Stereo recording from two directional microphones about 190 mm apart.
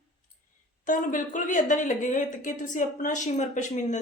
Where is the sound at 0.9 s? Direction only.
45° left (ahead or behind).